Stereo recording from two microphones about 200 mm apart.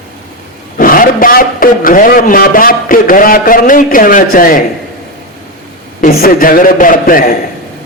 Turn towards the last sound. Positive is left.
turn(degrees=45)  # may be behind; listen again after turning